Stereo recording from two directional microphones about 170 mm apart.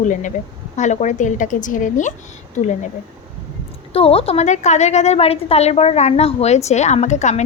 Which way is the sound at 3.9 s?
35° left (ahead or behind).